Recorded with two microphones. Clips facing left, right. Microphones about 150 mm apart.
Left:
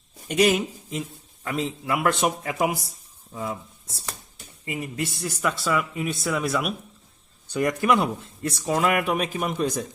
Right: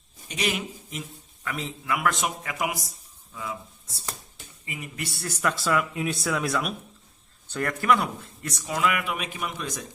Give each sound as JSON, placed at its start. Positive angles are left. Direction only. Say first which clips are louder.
{"t": 0.3, "sound": "speech", "louder": "left 9 dB", "side_deg": 45}
{"t": 1.5, "sound": "speech", "louder": "left 4 dB", "side_deg": 30}
{"t": 3.3, "sound": "speech", "louder": "left 4 dB", "side_deg": 40}
{"t": 4.9, "sound": "speech", "louder": "left 3 dB", "side_deg": 20}
{"t": 5.4, "sound": "speech", "louder": "even", "side_deg": 0}
{"t": 7.5, "sound": "speech", "louder": "left 2 dB", "side_deg": 15}